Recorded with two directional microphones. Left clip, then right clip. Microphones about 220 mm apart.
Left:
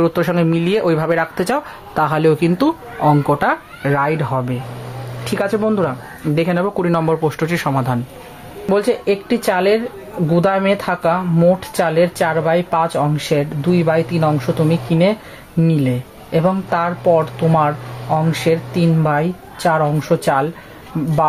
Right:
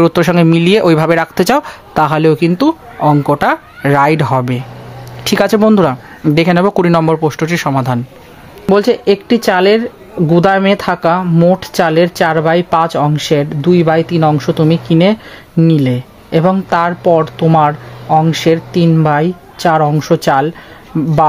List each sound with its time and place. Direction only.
0.0 s speech: 40° right (ahead or behind)
3.8 s speech: 45° right (ahead or behind); by 8.0 s 30° right (ahead or behind)
8.7 s speech: 50° right (ahead or behind)